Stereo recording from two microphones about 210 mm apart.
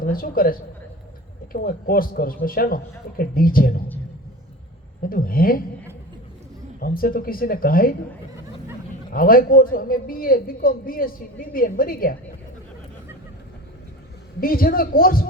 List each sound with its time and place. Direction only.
0.0 s speech: 45° left (ahead or behind)
1.5 s speech: 45° left (ahead or behind)
5.0 s speech: 45° left (ahead or behind)
6.7 s speech: 45° left (ahead or behind)
9.1 s speech: 45° left (ahead or behind)
14.4 s speech: 45° left (ahead or behind)